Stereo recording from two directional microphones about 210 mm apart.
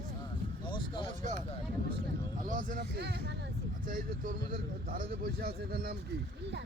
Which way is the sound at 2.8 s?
55° right (ahead or behind).